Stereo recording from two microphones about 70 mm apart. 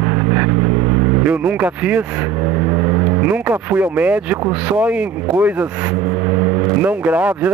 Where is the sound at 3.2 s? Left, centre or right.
Right.